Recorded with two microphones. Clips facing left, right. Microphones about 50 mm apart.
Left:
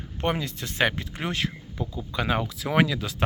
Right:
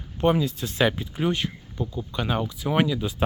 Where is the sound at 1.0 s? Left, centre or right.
Left.